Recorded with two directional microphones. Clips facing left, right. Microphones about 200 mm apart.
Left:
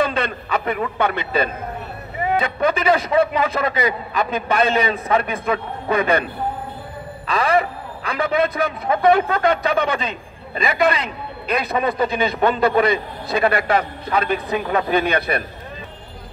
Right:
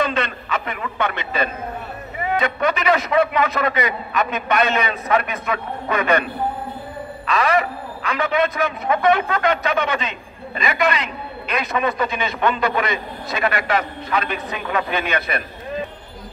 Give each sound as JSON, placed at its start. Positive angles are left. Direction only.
{"t": 0.0, "sound": "a man's voice", "side_deg": 35}
{"t": 7.2, "sound": "a man's voice", "side_deg": 30}